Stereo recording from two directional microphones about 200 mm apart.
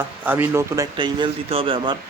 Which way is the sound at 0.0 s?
10° right (ahead or behind).